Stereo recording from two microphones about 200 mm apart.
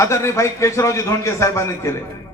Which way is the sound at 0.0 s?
15° left (ahead or behind).